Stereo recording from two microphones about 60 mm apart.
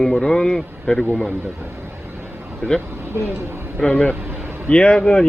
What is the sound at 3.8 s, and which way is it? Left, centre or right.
Speech, centre.